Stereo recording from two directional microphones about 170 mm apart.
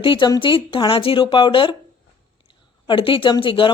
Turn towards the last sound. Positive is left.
turn(degrees=30)  # may be behind; listen again after turning